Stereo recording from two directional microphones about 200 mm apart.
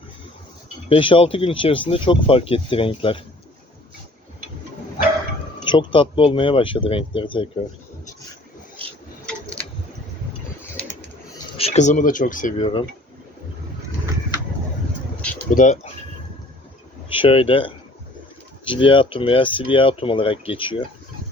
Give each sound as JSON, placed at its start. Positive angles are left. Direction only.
{"t": 0.9, "sound": "speech", "side_deg": 25}
{"t": 5.6, "sound": "speech", "side_deg": 25}
{"t": 11.5, "sound": "speech", "side_deg": 30}
{"t": 15.4, "sound": "speech", "side_deg": 40}
{"t": 17.1, "sound": "speech", "side_deg": 25}